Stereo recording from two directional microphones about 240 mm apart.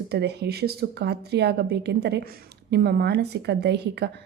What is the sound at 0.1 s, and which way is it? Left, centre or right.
A woman's voice, right.